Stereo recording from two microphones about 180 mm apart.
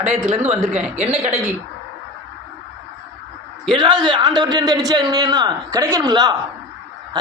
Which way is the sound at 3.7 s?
25° right (ahead or behind).